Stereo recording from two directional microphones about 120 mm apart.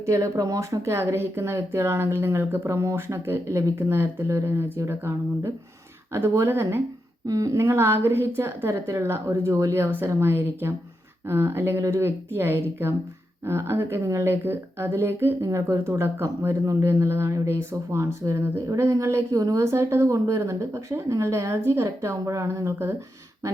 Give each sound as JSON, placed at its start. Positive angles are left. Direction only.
{"t": 0.0, "sound": "a woman's voice", "side_deg": -25}